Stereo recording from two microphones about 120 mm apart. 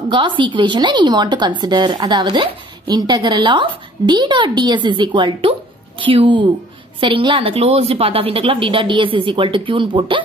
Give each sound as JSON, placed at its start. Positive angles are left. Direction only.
{"t": 0.1, "sound": "a woman's voice", "side_deg": -45}